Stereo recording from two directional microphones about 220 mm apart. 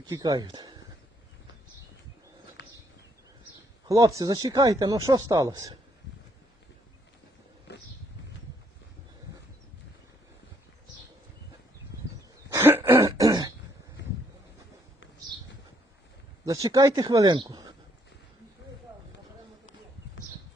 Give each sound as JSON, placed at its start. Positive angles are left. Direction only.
{"t": 0.1, "sound": "speech", "side_deg": -15}
{"t": 2.6, "sound": "a sound", "side_deg": 50}
{"t": 3.8, "sound": "speech", "side_deg": -15}
{"t": 7.7, "sound": "a sound", "side_deg": 50}
{"t": 12.5, "sound": "throat clearing", "side_deg": -10}
{"t": 16.5, "sound": "speech", "side_deg": -15}